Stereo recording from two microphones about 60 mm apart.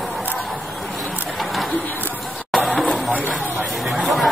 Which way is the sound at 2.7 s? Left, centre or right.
Centre.